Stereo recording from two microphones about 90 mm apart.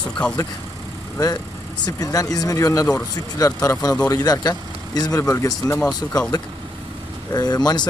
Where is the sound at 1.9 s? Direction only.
40° left (ahead or behind).